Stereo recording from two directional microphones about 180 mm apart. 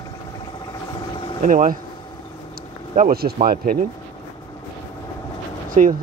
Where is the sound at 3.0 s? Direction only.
55° right (ahead or behind).